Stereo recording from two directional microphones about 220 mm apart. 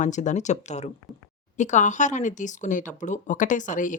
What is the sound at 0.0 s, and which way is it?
Speech, 35° left (ahead or behind).